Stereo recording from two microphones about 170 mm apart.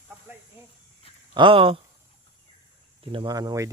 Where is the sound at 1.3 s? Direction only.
30° right (ahead or behind).